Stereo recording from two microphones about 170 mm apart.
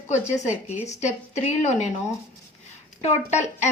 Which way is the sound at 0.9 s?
45° left (ahead or behind).